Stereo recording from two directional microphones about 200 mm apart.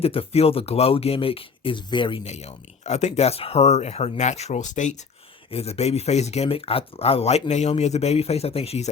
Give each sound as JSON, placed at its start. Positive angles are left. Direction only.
{"t": 0.0, "sound": "speech", "side_deg": 30}